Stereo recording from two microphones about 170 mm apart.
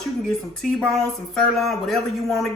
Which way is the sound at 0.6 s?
Centre (ahead or behind).